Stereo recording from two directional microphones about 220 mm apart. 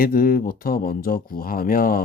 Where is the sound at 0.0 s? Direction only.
40° left (ahead or behind).